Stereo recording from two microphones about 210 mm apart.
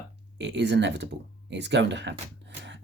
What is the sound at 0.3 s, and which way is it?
Speech, 55° right (ahead or behind).